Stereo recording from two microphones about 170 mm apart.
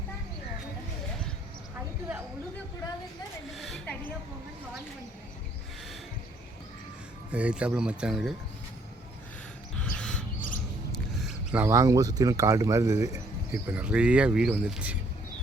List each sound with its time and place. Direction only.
3.5 s speech: centre (ahead or behind)
7.3 s speech: 5° right (ahead or behind)
9.8 s a sound: 5° left (ahead or behind)
11.6 s speech: 20° right (ahead or behind)